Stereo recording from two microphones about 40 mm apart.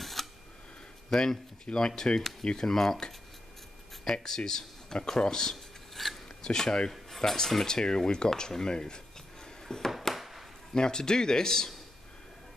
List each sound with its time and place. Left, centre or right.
0.0 s scissors: centre
1.1 s speech: centre
6.0 s filing: centre
6.4 s speech: centre
9.8 s a sound: centre
10.7 s speech: centre